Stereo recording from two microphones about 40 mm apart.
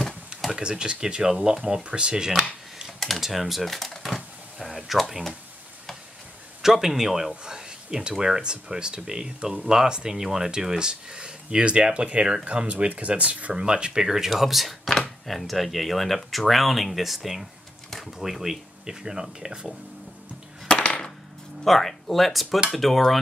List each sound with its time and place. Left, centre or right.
0.6 s speech: right
3.2 s speech: centre
3.7 s typewriter: centre
6.6 s speech: centre
14.0 s speech: centre
17.8 s a sound: centre
18.2 s speech: centre
20.6 s music: left
21.6 s speech: centre